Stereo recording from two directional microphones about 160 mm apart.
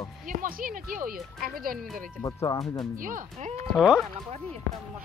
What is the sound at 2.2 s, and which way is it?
Speech, 20° left (ahead or behind).